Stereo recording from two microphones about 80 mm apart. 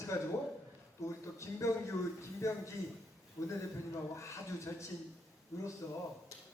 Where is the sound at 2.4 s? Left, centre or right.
Left.